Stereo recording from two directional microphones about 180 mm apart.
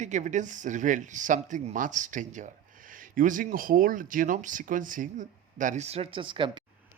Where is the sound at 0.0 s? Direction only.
40° right (ahead or behind).